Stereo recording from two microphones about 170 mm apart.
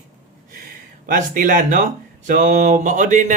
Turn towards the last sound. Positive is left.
turn(degrees=-45)  # may be behind; listen again after turning